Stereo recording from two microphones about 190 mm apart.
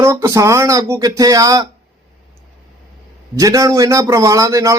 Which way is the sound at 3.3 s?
20° right (ahead or behind).